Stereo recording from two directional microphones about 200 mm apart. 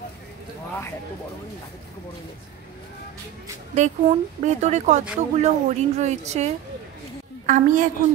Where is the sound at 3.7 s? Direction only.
35° right (ahead or behind).